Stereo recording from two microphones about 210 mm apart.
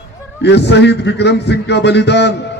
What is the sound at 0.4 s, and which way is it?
A man's voice, 55° left (ahead or behind).